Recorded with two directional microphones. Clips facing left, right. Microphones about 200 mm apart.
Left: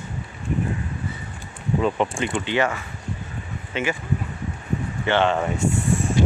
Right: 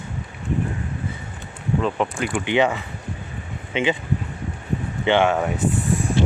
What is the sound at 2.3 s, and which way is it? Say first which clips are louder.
Speech: right 4 dB; 15° right (ahead or behind).